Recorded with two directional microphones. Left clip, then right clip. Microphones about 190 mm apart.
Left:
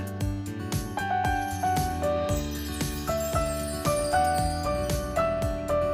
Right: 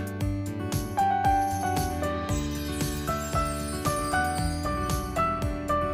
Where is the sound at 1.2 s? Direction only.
Centre (ahead or behind).